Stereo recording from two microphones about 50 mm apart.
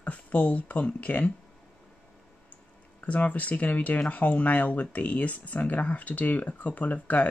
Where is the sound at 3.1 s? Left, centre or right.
Left.